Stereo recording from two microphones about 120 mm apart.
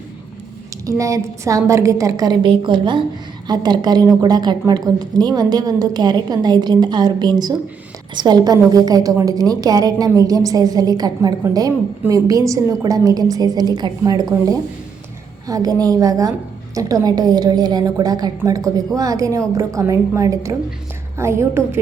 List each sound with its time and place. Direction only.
0.9 s a woman's voice: 25° right (ahead or behind)